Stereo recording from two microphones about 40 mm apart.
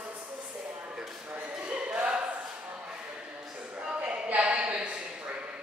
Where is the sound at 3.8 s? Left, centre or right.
Right.